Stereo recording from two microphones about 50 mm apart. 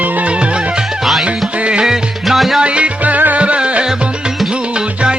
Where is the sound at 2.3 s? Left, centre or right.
Centre.